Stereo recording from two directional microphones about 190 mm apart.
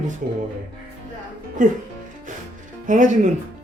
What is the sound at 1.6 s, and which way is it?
Speech, 45° right (ahead or behind).